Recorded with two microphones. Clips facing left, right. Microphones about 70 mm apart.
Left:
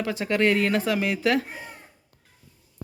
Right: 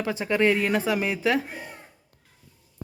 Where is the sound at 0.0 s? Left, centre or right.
Right.